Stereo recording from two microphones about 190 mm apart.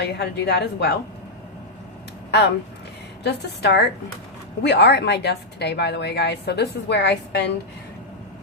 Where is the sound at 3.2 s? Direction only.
60° left (ahead or behind).